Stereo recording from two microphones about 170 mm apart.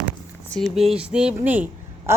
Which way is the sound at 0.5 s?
Centre (ahead or behind).